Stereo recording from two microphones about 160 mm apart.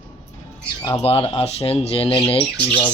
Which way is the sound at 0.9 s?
30° left (ahead or behind).